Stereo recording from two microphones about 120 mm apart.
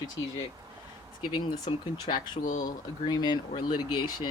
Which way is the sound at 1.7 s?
40° left (ahead or behind).